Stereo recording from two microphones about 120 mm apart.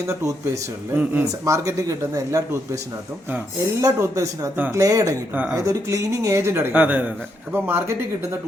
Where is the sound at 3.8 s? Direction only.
30° right (ahead or behind).